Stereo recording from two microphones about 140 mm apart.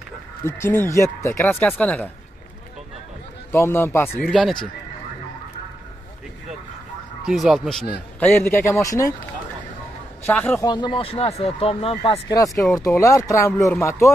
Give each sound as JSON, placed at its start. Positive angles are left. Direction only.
{"t": 0.4, "sound": "speech", "side_deg": 15}
{"t": 3.5, "sound": "speech", "side_deg": 20}
{"t": 4.2, "sound": "speech", "side_deg": 0}
{"t": 7.2, "sound": "speech", "side_deg": -5}
{"t": 8.2, "sound": "speech", "side_deg": 15}
{"t": 10.2, "sound": "speech", "side_deg": 15}
{"t": 10.6, "sound": "speech", "side_deg": 35}
{"t": 12.3, "sound": "speech", "side_deg": 25}